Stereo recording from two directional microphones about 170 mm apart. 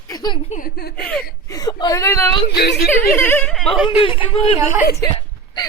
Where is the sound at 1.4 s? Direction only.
20° left (ahead or behind).